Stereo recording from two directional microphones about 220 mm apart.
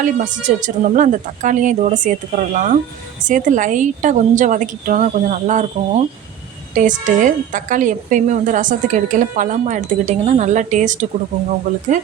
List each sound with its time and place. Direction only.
0.0 s a woman's voice: 35° right (ahead or behind)